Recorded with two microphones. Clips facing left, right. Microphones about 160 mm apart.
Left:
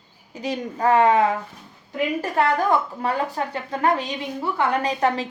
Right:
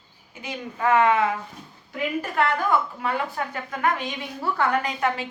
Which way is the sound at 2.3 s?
35° left (ahead or behind).